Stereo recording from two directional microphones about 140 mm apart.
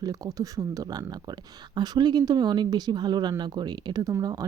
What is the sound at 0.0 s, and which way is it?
Speech, 25° right (ahead or behind).